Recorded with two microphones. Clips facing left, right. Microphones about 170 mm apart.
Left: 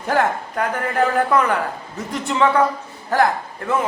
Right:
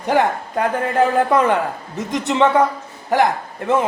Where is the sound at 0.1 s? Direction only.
15° right (ahead or behind).